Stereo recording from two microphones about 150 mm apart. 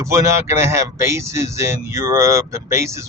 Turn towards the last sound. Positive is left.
turn(degrees=-20)  # may be behind; listen again after turning